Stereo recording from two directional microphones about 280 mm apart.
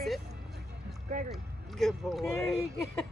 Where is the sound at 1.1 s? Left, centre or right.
Right.